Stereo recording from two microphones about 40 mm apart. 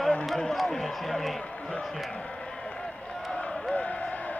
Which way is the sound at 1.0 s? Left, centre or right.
Centre.